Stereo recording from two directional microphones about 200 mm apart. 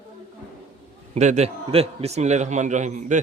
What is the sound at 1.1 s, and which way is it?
A man's voice, 35° right (ahead or behind).